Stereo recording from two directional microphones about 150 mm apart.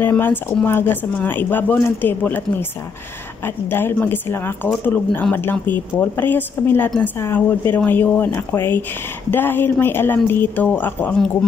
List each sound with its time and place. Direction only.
0.0 s speech: 15° left (ahead or behind)
3.4 s speech: 15° left (ahead or behind)